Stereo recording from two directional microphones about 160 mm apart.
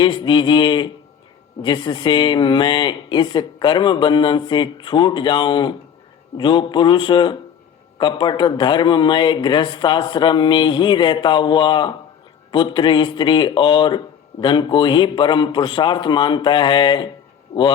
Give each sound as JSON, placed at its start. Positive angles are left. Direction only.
{"t": 0.0, "sound": "speech", "side_deg": 30}